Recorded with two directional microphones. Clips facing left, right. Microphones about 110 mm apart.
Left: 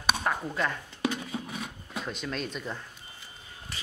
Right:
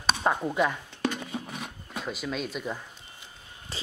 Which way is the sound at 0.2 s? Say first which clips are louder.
Right 4 dB; 20° right (ahead or behind).